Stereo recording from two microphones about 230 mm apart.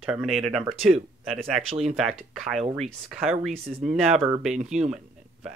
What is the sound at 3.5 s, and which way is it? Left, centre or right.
Speech, right.